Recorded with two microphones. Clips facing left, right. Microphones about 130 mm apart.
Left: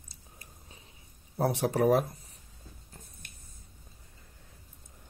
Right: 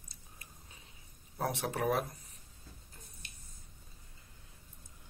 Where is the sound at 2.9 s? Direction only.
55° left (ahead or behind).